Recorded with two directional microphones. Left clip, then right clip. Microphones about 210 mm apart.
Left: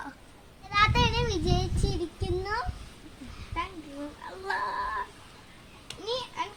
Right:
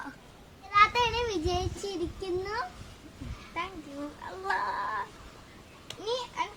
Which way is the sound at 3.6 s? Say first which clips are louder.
Left 1 dB; 15° right (ahead or behind).